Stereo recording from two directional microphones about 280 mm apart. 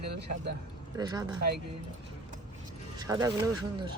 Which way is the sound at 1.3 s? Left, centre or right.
Right.